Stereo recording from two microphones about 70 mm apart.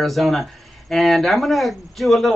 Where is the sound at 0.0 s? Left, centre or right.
Centre.